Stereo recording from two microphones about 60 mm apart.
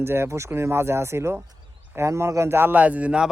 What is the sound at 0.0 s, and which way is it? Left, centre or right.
Speech, right.